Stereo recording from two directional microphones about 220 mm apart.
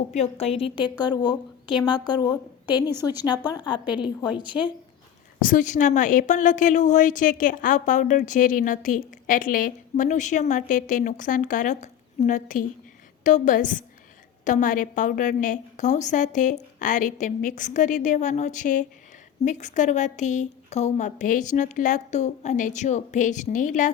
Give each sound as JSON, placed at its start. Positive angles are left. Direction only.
{"t": 0.1, "sound": "a woman's voice", "side_deg": 30}
{"t": 5.4, "sound": "a woman's voice", "side_deg": 40}